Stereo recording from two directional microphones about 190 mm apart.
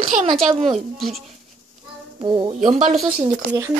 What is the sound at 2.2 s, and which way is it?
Speech, 25° right (ahead or behind).